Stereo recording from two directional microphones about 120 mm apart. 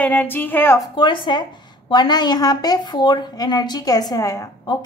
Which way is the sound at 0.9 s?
40° left (ahead or behind).